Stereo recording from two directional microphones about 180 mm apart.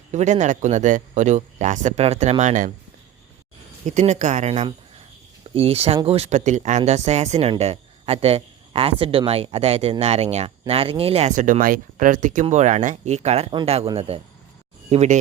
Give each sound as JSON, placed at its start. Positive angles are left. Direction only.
{"t": 0.1, "sound": "speech", "side_deg": -40}
{"t": 3.8, "sound": "speech", "side_deg": -40}